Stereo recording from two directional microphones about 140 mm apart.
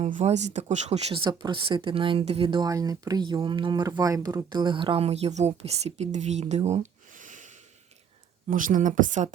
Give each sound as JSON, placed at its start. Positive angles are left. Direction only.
{"t": 0.0, "sound": "speech", "side_deg": -55}
{"t": 1.2, "sound": "speech", "side_deg": -35}
{"t": 2.6, "sound": "speech", "side_deg": -25}
{"t": 7.1, "sound": "a sound", "side_deg": -65}
{"t": 8.4, "sound": "a woman's voice", "side_deg": -75}